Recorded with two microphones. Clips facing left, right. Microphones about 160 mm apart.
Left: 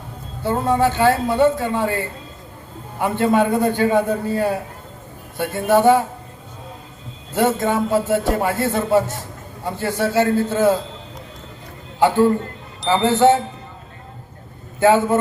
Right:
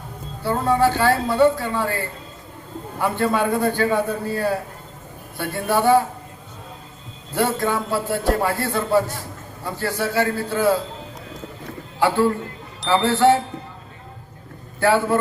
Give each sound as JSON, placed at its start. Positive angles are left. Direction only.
{"t": 0.4, "sound": "a man's voice", "side_deg": 20}
{"t": 3.0, "sound": "a man's voice", "side_deg": 20}
{"t": 7.3, "sound": "a man's voice", "side_deg": 20}
{"t": 11.9, "sound": "a man's voice", "side_deg": 20}
{"t": 14.8, "sound": "a man's voice", "side_deg": 20}